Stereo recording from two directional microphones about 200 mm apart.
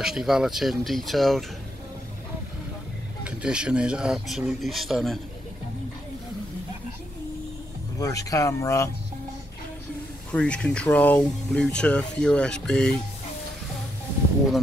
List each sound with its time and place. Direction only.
0.0 s speech: centre (ahead or behind)
3.3 s speech: 5° right (ahead or behind)
8.0 s speech: 15° left (ahead or behind)
10.3 s speech: 5° left (ahead or behind)